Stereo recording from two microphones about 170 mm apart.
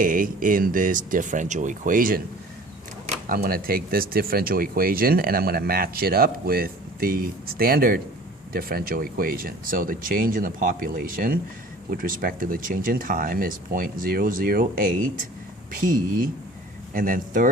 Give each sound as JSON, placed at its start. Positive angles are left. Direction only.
{"t": 0.0, "sound": "speech", "side_deg": -50}
{"t": 3.2, "sound": "speech", "side_deg": -60}